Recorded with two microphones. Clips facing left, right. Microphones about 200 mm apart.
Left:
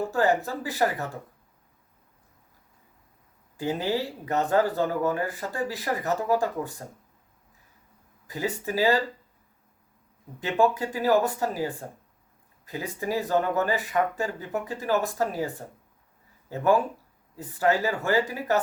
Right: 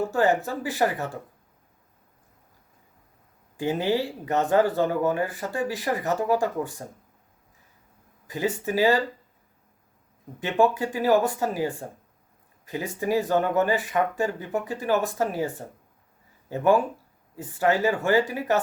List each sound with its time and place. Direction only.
0.0 s speech: 20° right (ahead or behind)
3.6 s speech: 20° right (ahead or behind)
8.3 s speech: 20° right (ahead or behind)
10.4 s speech: 15° right (ahead or behind)
13.0 s speech: 15° right (ahead or behind)
16.5 s speech: 15° right (ahead or behind)